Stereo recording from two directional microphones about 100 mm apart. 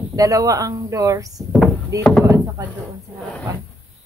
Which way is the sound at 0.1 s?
35° right (ahead or behind).